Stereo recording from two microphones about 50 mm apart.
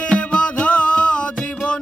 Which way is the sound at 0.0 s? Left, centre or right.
Left.